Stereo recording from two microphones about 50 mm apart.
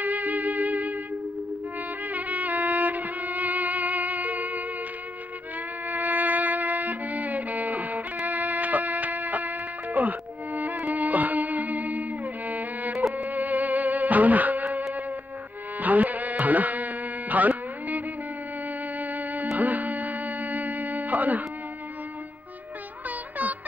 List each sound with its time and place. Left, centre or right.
0.0 s music: right
2.0 s music: right
5.9 s music: right
19.6 s a sound: right
23.0 s music: right